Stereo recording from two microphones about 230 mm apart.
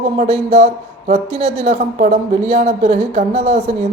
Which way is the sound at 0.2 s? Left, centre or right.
Right.